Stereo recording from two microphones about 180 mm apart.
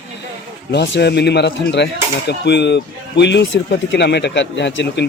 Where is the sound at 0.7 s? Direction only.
70° left (ahead or behind).